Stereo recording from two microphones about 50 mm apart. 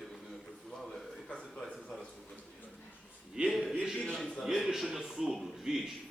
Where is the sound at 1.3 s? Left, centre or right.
Left.